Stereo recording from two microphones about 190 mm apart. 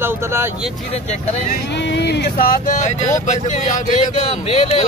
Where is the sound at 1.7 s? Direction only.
65° left (ahead or behind); by 2.8 s 50° left (ahead or behind).